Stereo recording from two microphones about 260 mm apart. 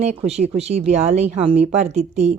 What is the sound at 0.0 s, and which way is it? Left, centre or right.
A woman's voice, right.